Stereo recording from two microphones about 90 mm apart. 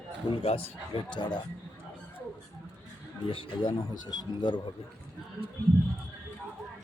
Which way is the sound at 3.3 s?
80° left.